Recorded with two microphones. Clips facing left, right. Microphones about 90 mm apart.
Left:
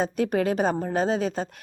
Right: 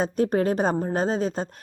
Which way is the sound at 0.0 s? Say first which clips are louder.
Right 1 dB; 35° right (ahead or behind).